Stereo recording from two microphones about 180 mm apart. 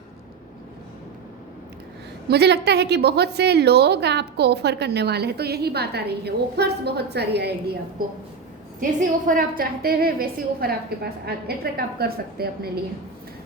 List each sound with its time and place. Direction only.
2.2 s a woman's voice: 65° right (ahead or behind)
8.8 s a woman's voice: 50° right (ahead or behind)